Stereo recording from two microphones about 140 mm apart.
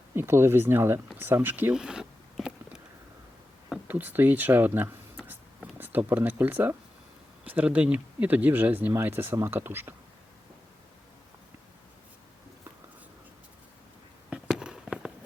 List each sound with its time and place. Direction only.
0.1 s speech: 15° right (ahead or behind)
3.7 s a sound: 10° right (ahead or behind)
7.4 s speech: 10° right (ahead or behind)
14.3 s fireworks: 5° right (ahead or behind)